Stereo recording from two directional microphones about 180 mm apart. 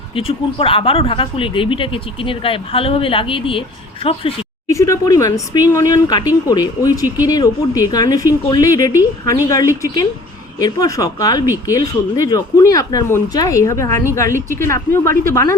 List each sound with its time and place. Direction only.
0.2 s speech: 30° left (ahead or behind)
4.7 s speech: 15° left (ahead or behind)